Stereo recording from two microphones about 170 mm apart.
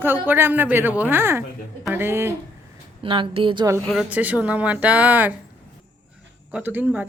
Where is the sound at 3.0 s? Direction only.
30° right (ahead or behind).